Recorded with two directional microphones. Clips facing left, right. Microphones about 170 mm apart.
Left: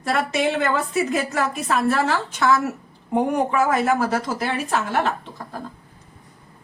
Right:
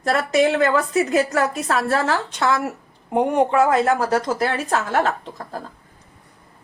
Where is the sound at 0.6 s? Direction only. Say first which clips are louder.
Right 3 dB; 40° right (ahead or behind).